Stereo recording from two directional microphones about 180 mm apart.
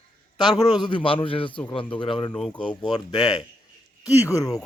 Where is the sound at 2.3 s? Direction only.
5° left (ahead or behind).